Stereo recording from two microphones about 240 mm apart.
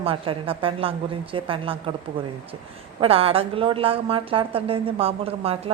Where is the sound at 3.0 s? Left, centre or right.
Right.